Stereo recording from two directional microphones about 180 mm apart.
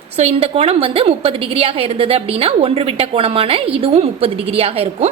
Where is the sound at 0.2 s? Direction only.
35° right (ahead or behind).